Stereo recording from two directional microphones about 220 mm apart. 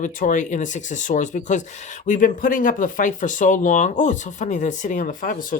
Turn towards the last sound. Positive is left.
turn(degrees=40)  # may be behind; listen again after turning